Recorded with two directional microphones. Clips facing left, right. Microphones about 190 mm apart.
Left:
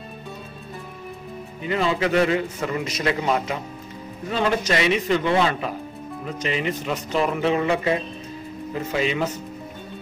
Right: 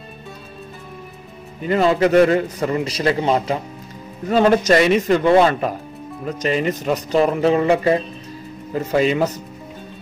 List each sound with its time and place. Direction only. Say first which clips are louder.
1.7 s a man's voice: right 6 dB; 45° right (ahead or behind)
4.3 s a man's voice: right 8 dB; 45° right (ahead or behind)